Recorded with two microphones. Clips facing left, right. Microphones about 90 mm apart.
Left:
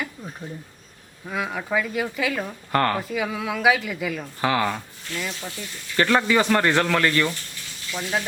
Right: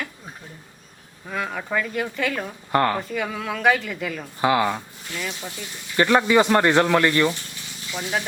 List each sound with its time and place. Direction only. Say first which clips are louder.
1.3 s a man's voice: left 1 dB; 5° left (ahead or behind)
3.0 s speech: left 1 dB; 5° left (ahead or behind)
4.2 s a man's voice: right 4 dB; 15° right (ahead or behind)